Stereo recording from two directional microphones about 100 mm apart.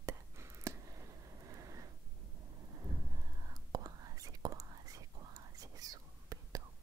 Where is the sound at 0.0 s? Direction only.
30° right (ahead or behind).